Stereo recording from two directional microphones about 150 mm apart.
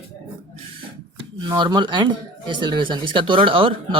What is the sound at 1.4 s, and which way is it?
Speech, 30° right (ahead or behind).